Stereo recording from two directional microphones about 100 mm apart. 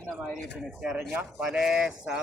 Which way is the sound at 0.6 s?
10° right (ahead or behind).